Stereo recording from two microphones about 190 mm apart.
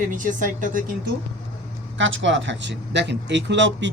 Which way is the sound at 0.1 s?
45° right (ahead or behind).